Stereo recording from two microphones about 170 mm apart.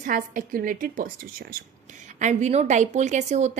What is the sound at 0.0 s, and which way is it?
A woman's voice, 55° right (ahead or behind).